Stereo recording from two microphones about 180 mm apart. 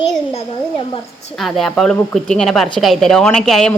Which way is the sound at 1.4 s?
Centre (ahead or behind).